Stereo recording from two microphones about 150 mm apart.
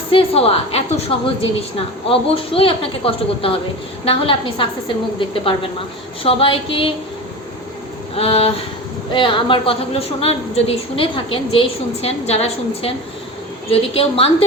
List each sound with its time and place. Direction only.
0.1 s a woman's voice: 40° left (ahead or behind)
6.2 s a woman's voice: 35° left (ahead or behind)
8.1 s a woman's voice: 40° left (ahead or behind)